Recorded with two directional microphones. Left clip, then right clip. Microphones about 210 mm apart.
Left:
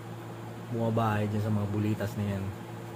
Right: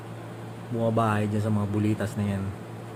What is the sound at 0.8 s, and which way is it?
Speech, 20° right (ahead or behind).